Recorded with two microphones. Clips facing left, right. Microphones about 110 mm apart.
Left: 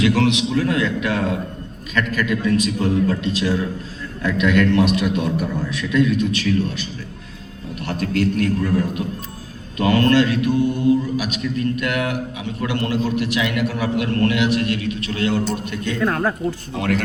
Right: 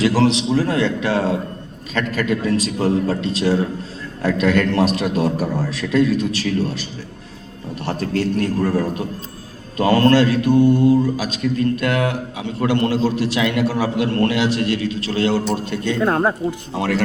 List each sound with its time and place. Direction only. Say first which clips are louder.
0.0 s speech: right 1 dB; 35° right (ahead or behind)
7.9 s speech: even; 30° right (ahead or behind)